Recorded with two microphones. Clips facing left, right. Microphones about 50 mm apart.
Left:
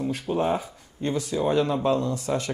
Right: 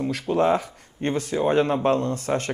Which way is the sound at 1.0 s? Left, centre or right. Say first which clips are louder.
Right 2 dB; right.